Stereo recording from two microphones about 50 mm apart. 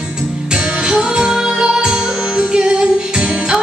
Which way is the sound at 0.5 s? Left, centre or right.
Right.